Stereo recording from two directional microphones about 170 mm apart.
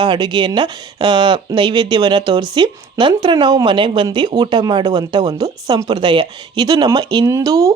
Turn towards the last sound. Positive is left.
turn(degrees=-20)  # may be behind; listen again after turning